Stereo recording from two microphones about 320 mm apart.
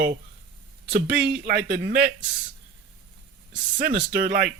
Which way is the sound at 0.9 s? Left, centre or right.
Right.